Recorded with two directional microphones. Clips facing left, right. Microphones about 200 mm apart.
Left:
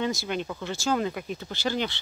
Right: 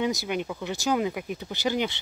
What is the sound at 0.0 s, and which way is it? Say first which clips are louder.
Speech: right 1 dB; 15° right (ahead or behind).